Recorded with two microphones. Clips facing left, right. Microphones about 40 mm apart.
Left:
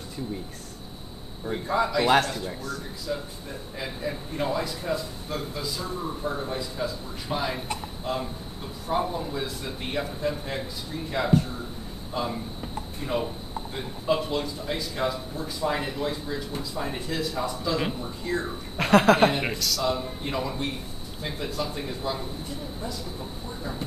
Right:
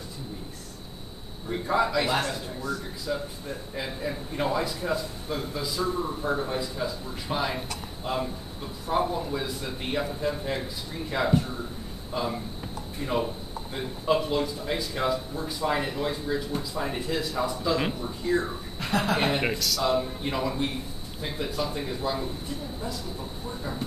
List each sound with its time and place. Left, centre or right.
1.5 s speech: centre
3.1 s a man's voice: centre
18.8 s a woman's voice: left
19.3 s a man's voice: centre
20.2 s speech: centre